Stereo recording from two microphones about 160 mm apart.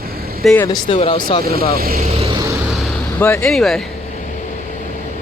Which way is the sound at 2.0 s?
40° right (ahead or behind).